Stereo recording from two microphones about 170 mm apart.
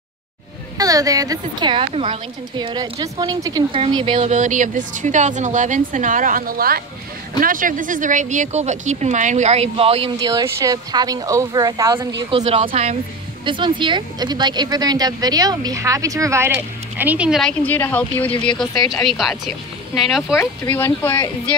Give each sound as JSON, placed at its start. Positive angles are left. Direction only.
{"t": 0.7, "sound": "a woman's voice", "side_deg": -20}
{"t": 4.3, "sound": "speech", "side_deg": -50}
{"t": 10.1, "sound": "a woman's voice", "side_deg": -20}
{"t": 12.4, "sound": "a woman's voice", "side_deg": -35}
{"t": 20.3, "sound": "speech", "side_deg": 15}